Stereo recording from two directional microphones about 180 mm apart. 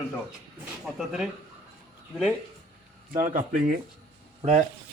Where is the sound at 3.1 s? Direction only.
45° right (ahead or behind).